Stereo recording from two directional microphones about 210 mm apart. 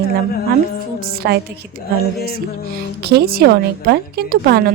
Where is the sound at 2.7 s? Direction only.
50° right (ahead or behind).